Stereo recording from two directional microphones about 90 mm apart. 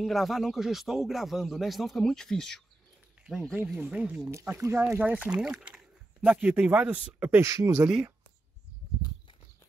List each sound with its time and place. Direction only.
0.0 s speech: centre (ahead or behind)
3.2 s a sound: 10° right (ahead or behind)
3.5 s speech: 10° right (ahead or behind)
4.2 s speech: 35° right (ahead or behind)
4.8 s speech: 20° right (ahead or behind)
7.4 s speech: 30° right (ahead or behind)